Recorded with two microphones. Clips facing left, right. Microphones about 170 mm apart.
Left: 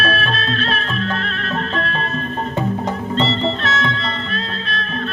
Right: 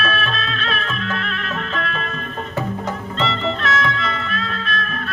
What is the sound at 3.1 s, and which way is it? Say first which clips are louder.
Music: left 3 dB; 30° left (ahead or behind).